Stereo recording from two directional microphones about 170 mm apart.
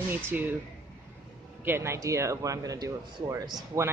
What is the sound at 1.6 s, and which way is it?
Speech, 15° right (ahead or behind).